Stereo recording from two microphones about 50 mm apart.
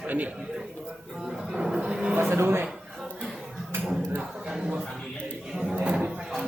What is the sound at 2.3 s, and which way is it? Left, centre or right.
Speech, right.